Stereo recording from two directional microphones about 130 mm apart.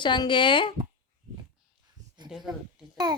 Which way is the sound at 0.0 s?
35° left (ahead or behind).